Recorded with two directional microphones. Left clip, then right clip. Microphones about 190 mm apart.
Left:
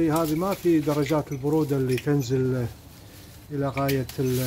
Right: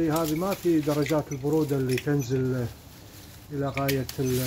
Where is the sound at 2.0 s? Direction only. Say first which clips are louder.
Left 2 dB; 25° left (ahead or behind).